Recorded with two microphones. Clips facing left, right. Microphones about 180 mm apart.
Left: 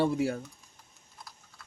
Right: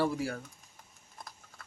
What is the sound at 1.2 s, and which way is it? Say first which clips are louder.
Typing: right 2 dB; 50° right (ahead or behind).